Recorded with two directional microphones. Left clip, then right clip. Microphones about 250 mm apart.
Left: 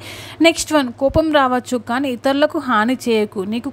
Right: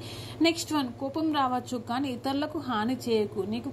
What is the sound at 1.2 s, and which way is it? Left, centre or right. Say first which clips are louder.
A woman's voice: left 7 dB; left.